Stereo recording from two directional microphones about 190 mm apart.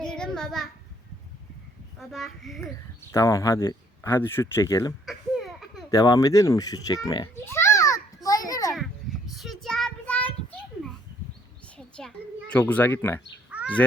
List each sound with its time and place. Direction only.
0.0 s child singing: 5° left (ahead or behind)
2.0 s a child's voice: centre (ahead or behind)
3.1 s speech: 15° left (ahead or behind)
5.0 s a sound: centre (ahead or behind)
5.9 s a sound: 20° left (ahead or behind)
8.7 s child singing: centre (ahead or behind)
11.9 s a child's voice: 5° left (ahead or behind)
13.5 s bird: 5° right (ahead or behind)